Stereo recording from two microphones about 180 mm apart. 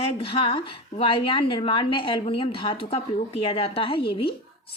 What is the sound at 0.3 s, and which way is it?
A woman's voice, 30° left (ahead or behind).